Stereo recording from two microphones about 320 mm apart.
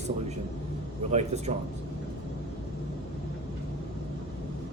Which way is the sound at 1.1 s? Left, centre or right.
Centre.